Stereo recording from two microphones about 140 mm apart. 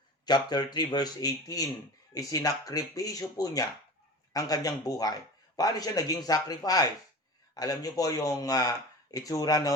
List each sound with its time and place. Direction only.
0.3 s speech: 30° left (ahead or behind)